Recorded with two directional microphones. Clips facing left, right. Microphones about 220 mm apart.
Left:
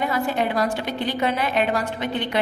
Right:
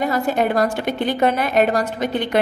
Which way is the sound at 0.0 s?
45° right (ahead or behind).